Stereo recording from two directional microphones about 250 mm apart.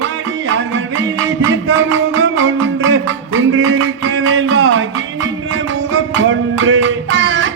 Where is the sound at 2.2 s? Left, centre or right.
Right.